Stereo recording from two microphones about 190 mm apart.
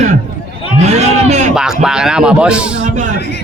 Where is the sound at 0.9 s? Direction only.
35° right (ahead or behind).